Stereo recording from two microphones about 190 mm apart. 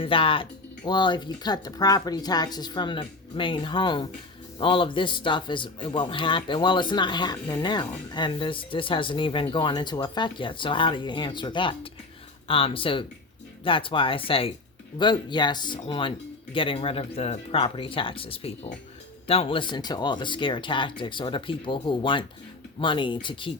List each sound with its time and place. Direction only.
0.0 s a man's voice: 30° left (ahead or behind)